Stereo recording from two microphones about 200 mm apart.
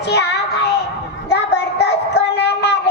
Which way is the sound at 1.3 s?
55° left (ahead or behind).